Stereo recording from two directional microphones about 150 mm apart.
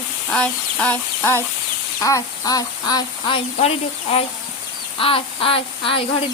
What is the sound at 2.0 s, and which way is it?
Speech, 20° left (ahead or behind).